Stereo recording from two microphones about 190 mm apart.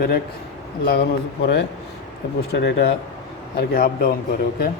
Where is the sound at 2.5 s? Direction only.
60° left (ahead or behind).